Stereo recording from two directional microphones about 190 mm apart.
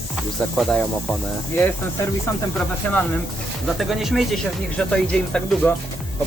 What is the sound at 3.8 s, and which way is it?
Speech, centre (ahead or behind).